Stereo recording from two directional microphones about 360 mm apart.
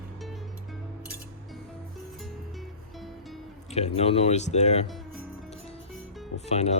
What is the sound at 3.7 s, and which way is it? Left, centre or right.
Speech, centre.